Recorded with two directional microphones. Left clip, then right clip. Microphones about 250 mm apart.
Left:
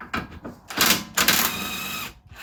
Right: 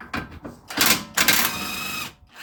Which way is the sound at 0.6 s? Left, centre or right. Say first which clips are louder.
Even; centre.